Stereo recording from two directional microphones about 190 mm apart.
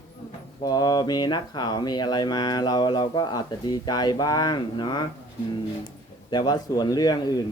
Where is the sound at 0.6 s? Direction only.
20° left (ahead or behind).